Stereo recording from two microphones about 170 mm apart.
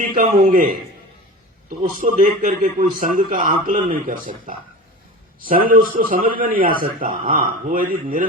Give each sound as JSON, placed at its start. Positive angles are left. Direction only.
{"t": 0.0, "sound": "a man's voice", "side_deg": -55}
{"t": 1.8, "sound": "a man's voice", "side_deg": -50}